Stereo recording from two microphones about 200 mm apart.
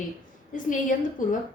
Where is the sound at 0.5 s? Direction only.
40° left (ahead or behind).